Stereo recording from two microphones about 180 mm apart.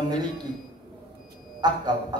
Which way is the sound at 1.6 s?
25° right (ahead or behind).